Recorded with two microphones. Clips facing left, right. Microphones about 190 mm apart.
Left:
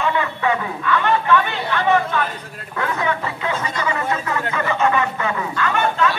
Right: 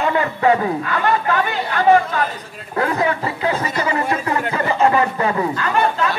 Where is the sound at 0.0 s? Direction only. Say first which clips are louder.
Right 3 dB; 40° right (ahead or behind).